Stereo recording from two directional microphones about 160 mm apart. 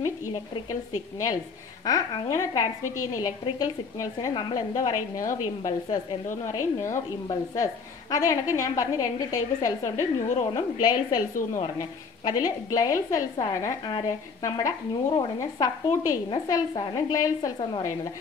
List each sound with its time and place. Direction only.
0.0 s speech: 20° left (ahead or behind)
1.9 s a woman's voice: 20° left (ahead or behind)